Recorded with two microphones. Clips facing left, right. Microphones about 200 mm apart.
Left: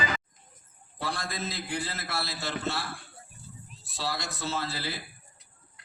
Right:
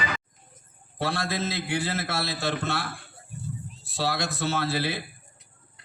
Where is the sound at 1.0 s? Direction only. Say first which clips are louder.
Right 6 dB; 70° right (ahead or behind).